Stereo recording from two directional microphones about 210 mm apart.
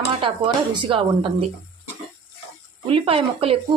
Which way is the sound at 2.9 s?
25° right (ahead or behind).